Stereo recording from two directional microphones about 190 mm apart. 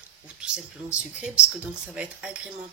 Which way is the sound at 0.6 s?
5° right (ahead or behind).